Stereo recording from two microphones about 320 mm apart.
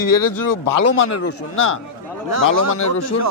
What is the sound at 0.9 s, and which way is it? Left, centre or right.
Speech, left.